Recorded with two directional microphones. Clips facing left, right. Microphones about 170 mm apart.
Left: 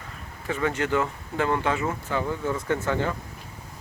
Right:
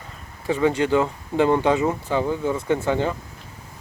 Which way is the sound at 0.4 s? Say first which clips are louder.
Right 6 dB; 20° right (ahead or behind).